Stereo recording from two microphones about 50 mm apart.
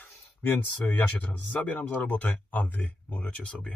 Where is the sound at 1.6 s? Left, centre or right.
Left.